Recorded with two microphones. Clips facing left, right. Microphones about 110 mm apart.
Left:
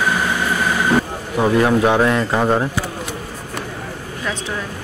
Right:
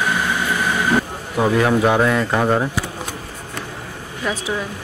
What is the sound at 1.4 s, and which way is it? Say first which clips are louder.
Speech: left 1 dB; centre (ahead or behind).